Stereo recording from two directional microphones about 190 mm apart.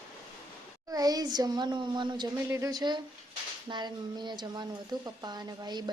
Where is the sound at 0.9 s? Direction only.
20° right (ahead or behind).